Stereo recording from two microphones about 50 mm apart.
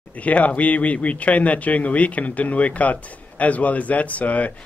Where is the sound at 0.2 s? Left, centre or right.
Left.